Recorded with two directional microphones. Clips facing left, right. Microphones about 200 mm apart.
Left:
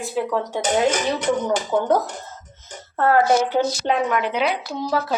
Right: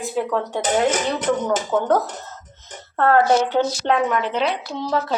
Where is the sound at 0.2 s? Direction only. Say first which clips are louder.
Even; centre (ahead or behind).